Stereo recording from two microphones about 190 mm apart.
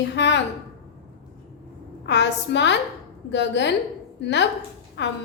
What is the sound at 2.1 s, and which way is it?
A woman's voice, 65° left (ahead or behind).